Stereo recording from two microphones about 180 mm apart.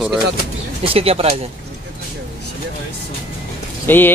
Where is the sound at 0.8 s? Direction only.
35° right (ahead or behind).